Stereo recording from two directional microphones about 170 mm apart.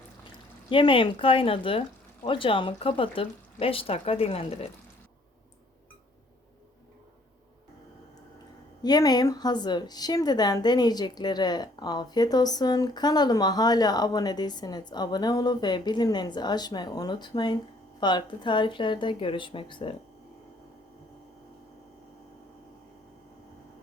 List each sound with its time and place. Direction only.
0.7 s speech: 30° left (ahead or behind)
8.8 s a woman's voice: 25° left (ahead or behind)